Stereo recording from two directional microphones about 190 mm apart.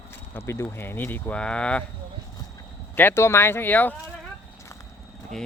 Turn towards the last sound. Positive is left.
turn(degrees=10)  # may be behind; listen again after turning